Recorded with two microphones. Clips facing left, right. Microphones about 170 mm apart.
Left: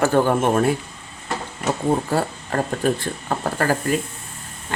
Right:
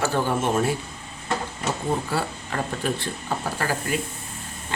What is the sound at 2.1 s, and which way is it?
Speech, 45° left (ahead or behind).